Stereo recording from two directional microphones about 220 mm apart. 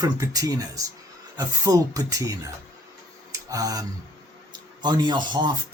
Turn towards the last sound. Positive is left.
turn(degrees=-20)  # may be behind; listen again after turning